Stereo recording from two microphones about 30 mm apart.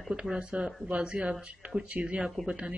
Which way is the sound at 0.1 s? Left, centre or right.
Right.